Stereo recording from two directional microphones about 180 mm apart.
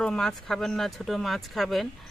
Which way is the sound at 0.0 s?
5° left (ahead or behind).